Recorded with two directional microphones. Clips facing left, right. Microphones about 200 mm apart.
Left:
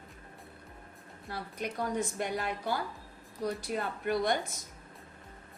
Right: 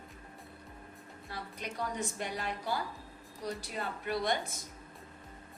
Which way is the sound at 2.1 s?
55° left (ahead or behind).